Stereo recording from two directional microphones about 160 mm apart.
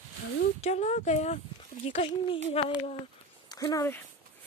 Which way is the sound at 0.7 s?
45° left (ahead or behind).